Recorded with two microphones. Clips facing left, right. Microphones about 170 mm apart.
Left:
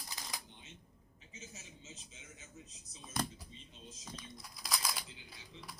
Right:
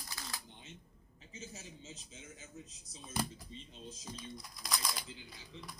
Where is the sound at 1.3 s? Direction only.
30° right (ahead or behind).